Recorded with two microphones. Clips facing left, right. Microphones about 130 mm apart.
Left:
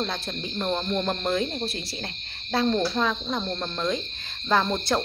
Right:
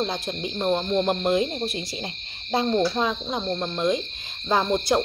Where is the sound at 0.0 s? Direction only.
15° right (ahead or behind).